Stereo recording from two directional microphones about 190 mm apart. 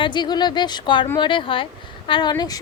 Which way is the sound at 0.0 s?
25° left (ahead or behind).